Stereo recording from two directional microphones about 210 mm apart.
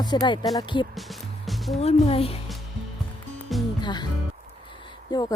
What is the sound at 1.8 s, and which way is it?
Speech, 30° left (ahead or behind).